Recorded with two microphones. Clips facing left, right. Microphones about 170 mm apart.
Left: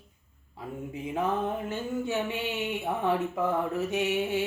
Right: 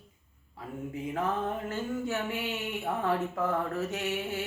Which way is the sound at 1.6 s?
20° left (ahead or behind).